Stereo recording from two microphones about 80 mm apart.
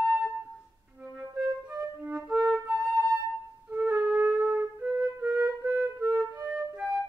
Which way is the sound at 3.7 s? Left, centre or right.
Centre.